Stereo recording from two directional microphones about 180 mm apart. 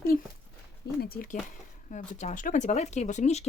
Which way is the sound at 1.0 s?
55° left (ahead or behind).